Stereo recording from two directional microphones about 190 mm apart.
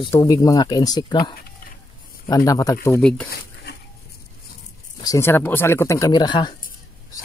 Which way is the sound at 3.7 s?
60° left (ahead or behind).